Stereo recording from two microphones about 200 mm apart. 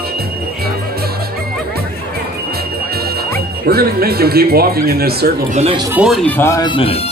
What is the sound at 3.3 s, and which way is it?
Speech, 50° right (ahead or behind).